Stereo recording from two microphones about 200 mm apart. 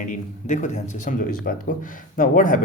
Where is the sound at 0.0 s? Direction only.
40° left (ahead or behind).